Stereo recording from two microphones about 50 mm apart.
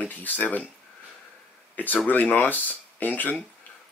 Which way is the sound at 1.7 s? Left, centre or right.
Left.